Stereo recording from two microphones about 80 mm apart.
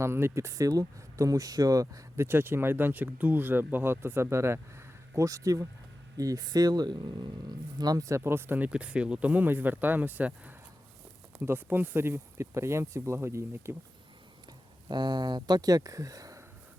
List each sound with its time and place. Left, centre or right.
0.0 s speech: right
2.1 s speech: right
8.0 s speech: right
14.8 s speech: right